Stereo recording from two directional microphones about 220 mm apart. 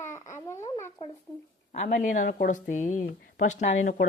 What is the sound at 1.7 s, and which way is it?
Speech, 35° left (ahead or behind).